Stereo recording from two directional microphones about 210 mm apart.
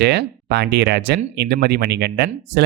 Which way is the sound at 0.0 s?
50° right (ahead or behind).